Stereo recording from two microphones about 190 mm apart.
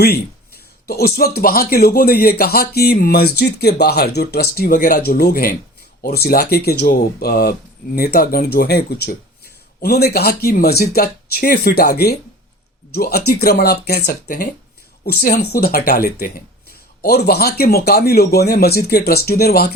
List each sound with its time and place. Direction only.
0.0 s speech: 55° left (ahead or behind)